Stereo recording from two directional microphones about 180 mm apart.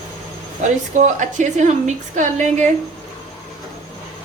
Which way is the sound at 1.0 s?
40° right (ahead or behind).